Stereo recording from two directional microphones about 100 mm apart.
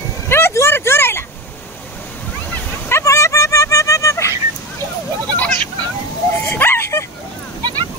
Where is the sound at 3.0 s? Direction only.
30° left (ahead or behind).